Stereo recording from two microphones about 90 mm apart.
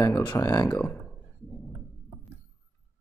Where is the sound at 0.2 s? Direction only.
50° left (ahead or behind).